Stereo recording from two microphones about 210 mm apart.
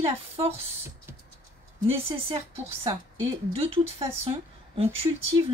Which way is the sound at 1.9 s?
30° right (ahead or behind).